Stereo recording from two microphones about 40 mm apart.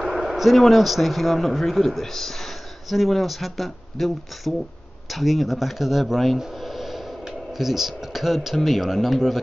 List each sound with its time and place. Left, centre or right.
0.0 s speech: centre